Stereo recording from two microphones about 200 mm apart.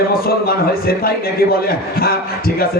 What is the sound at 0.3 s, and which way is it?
Speech, 50° left (ahead or behind).